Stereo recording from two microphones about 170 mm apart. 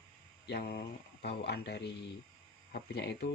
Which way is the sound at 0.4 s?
70° left (ahead or behind).